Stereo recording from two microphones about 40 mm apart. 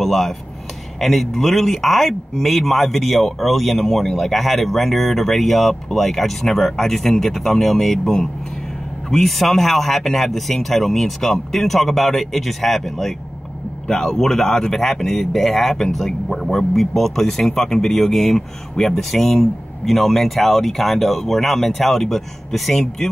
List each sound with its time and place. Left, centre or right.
0.0 s speech: centre
13.8 s speech: centre